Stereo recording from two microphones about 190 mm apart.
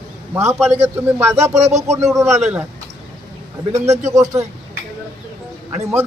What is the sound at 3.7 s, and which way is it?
Speech, 15° right (ahead or behind).